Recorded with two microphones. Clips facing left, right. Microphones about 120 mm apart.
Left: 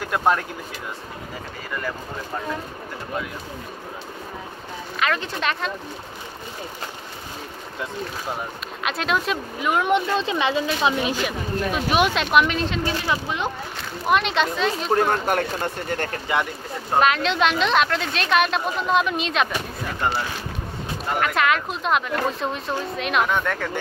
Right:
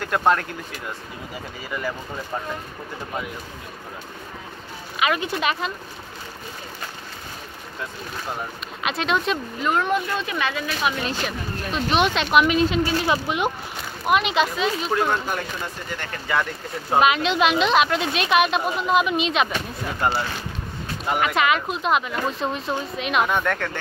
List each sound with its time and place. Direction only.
0.0 s speech: 5° left (ahead or behind)
1.7 s speech: 5° right (ahead or behind)
4.9 s speech: 10° right (ahead or behind)
8.8 s a woman's voice: centre (ahead or behind)
9.9 s speech: 25° left (ahead or behind)
11.1 s a woman's voice: 10° left (ahead or behind); by 13.5 s 20° right (ahead or behind)
14.0 s a woman's voice: 5° right (ahead or behind)
14.9 s speech: 45° left (ahead or behind)
16.3 s speech: 20° left (ahead or behind)
16.9 s a woman's voice: 5° right (ahead or behind)
21.1 s a woman's voice: 5° right (ahead or behind)